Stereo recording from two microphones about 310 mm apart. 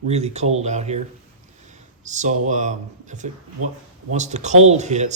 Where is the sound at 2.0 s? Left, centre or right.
Right.